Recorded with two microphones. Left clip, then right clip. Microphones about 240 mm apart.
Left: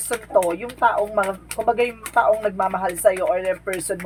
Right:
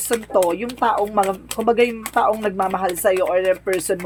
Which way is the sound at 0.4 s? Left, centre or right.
Right.